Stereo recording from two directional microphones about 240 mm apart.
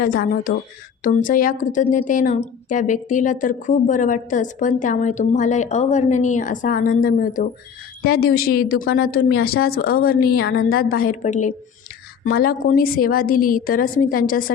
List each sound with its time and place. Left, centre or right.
0.0 s a woman's voice: left